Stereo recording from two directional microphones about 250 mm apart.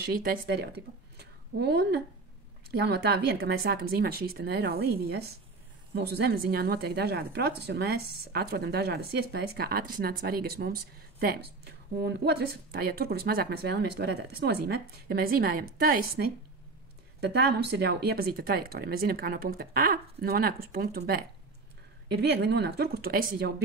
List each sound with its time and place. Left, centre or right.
0.0 s a woman's voice: right